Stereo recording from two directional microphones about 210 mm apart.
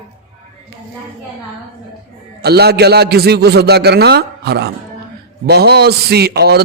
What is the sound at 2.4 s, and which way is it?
A man's voice, 50° right (ahead or behind).